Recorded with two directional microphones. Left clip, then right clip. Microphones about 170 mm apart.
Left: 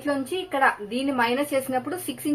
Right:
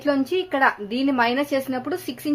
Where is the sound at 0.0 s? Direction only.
70° right (ahead or behind).